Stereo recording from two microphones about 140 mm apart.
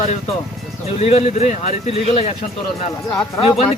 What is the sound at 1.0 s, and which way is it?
Speech, 45° left (ahead or behind).